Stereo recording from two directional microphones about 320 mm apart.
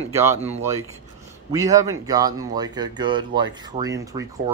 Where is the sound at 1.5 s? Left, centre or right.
Centre.